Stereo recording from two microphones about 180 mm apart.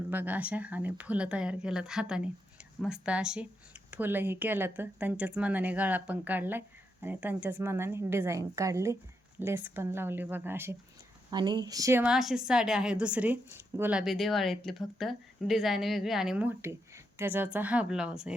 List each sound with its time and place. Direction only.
0.1 s a woman's voice: 10° right (ahead or behind)
11.3 s speech: 25° right (ahead or behind)
12.0 s a woman's voice: 5° right (ahead or behind)